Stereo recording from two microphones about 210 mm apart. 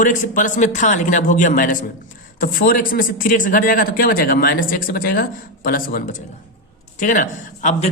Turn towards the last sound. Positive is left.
turn(degrees=35)  # may be behind; listen again after turning